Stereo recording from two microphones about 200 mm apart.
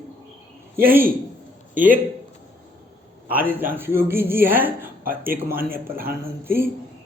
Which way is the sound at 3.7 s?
10° right (ahead or behind).